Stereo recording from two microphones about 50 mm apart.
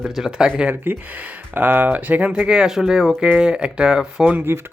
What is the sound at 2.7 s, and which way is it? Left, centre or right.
Speech, centre.